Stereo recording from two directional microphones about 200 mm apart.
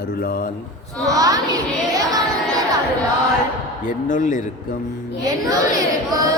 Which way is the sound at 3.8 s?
40° left (ahead or behind).